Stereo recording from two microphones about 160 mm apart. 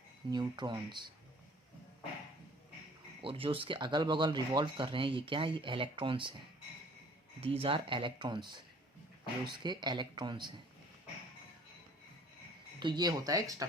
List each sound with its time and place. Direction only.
0.3 s speech: 25° right (ahead or behind)
3.2 s speech: 35° right (ahead or behind)
7.4 s speech: 35° right (ahead or behind)
12.8 s speech: 25° right (ahead or behind)